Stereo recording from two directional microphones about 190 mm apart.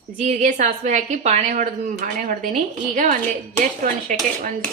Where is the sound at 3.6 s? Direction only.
45° right (ahead or behind).